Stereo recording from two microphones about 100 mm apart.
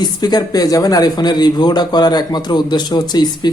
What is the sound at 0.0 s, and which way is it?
A man's voice, 45° left (ahead or behind).